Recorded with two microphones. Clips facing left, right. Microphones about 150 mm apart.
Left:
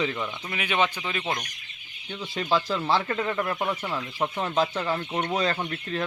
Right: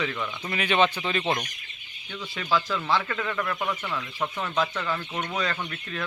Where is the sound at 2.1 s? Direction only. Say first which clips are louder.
Left 1 dB; 25° left (ahead or behind).